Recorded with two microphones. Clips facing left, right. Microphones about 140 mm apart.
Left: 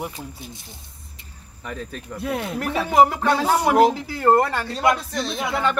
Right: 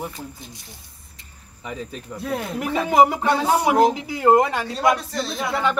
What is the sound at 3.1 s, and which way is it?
Speech, 10° right (ahead or behind).